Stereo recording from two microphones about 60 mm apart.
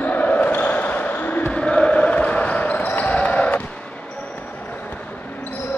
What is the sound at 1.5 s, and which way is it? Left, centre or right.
Basketball bounce, centre.